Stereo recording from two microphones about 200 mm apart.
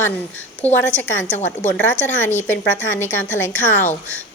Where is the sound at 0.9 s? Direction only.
65° left (ahead or behind).